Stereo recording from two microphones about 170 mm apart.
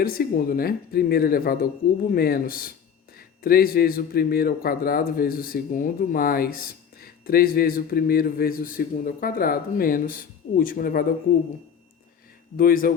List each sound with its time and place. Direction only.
0.0 s speech: 60° left (ahead or behind)
12.5 s speech: 55° left (ahead or behind)